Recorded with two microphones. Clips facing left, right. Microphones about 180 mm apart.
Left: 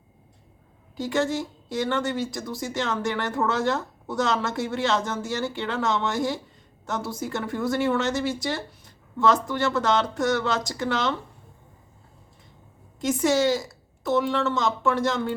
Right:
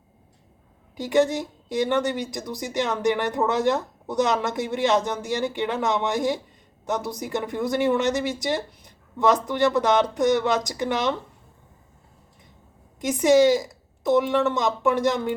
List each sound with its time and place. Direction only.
0.9 s speech: 15° right (ahead or behind)
13.0 s speech: 15° right (ahead or behind)